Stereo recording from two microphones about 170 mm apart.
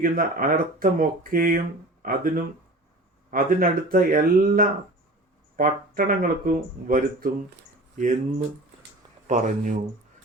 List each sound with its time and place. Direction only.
0.0 s speech: 55° right (ahead or behind)